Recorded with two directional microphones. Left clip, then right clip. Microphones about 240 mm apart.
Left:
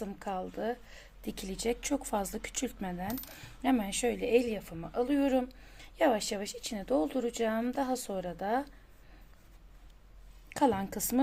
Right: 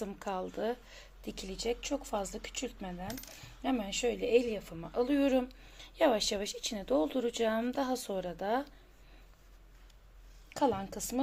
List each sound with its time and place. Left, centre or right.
0.0 s a woman's voice: centre
10.5 s a woman's voice: centre